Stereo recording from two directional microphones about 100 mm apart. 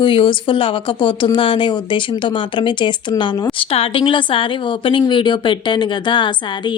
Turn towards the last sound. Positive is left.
turn(degrees=55)  # may be behind; listen again after turning